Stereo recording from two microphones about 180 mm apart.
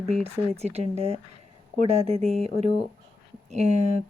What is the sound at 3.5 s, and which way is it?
Speech, 40° right (ahead or behind).